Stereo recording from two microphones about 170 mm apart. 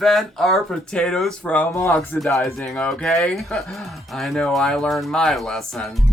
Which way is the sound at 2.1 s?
Centre (ahead or behind).